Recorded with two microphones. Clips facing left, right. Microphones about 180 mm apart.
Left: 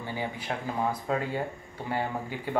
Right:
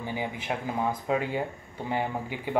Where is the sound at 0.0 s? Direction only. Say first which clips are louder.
Right 1 dB; 15° right (ahead or behind).